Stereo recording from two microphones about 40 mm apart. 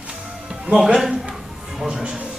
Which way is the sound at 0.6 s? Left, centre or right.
Centre.